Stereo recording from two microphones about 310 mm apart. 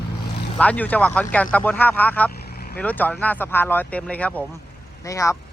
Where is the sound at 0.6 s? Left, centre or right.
Centre.